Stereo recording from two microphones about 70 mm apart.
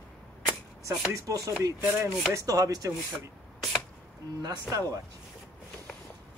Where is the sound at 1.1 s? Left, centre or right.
Right.